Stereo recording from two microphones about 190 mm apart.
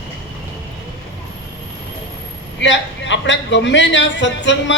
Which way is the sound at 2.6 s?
70° left (ahead or behind).